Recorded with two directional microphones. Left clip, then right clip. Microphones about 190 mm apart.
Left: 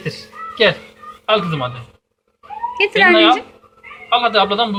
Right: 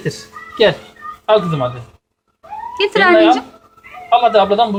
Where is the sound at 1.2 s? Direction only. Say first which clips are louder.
Right 3 dB; 15° right (ahead or behind).